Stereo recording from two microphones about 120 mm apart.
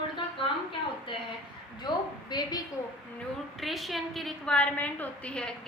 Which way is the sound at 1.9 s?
40° left (ahead or behind).